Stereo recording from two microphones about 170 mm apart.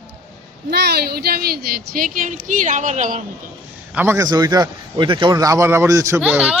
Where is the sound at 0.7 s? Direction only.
70° right (ahead or behind); by 3.2 s 45° right (ahead or behind).